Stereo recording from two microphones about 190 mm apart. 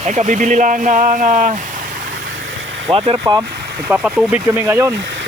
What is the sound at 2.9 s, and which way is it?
Speech, 30° right (ahead or behind).